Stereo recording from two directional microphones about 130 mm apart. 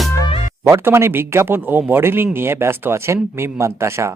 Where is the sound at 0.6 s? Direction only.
20° right (ahead or behind).